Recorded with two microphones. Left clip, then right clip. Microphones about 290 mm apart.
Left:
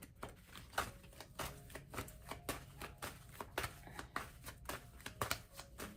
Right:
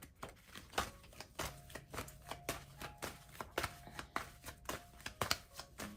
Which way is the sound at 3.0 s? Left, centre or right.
Right.